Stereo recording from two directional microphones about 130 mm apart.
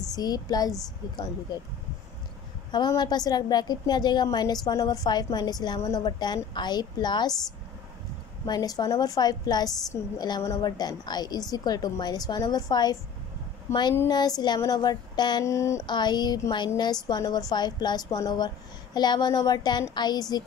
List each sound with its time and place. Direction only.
0.1 s a woman's voice: 30° left (ahead or behind)
2.9 s a woman's voice: 30° left (ahead or behind)
8.5 s a woman's voice: 30° left (ahead or behind)
15.8 s a woman's voice: 35° left (ahead or behind)